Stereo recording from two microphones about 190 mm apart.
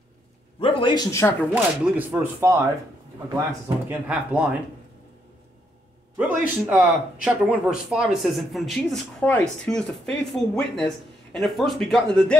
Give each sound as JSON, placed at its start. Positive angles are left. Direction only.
{"t": 0.6, "sound": "a man's voice", "side_deg": 25}
{"t": 1.5, "sound": "speech", "side_deg": -10}
{"t": 3.6, "sound": "speech", "side_deg": -10}
{"t": 6.1, "sound": "speech", "side_deg": -10}